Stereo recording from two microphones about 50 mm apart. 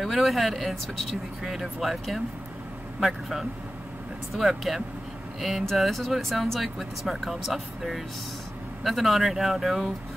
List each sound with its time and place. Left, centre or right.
0.0 s speech: centre